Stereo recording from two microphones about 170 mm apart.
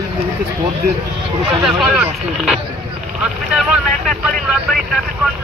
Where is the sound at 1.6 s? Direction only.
5° right (ahead or behind).